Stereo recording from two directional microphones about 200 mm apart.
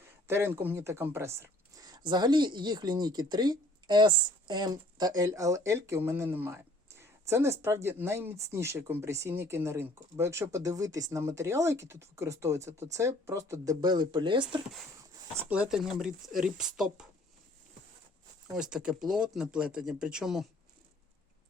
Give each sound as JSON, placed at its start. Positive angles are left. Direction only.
{"t": 0.3, "sound": "speech", "side_deg": -10}
{"t": 15.4, "sound": "speech", "side_deg": -5}
{"t": 18.5, "sound": "speech", "side_deg": -5}